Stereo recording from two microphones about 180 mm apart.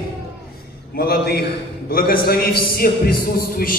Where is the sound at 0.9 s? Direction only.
60° left (ahead or behind).